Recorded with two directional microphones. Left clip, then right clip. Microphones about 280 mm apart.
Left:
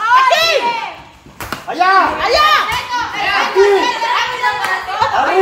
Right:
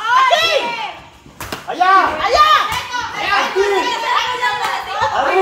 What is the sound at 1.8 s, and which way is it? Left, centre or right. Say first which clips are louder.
Children playing: left 1 dB; left.